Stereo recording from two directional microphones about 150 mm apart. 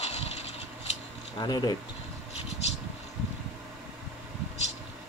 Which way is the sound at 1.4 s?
30° left (ahead or behind).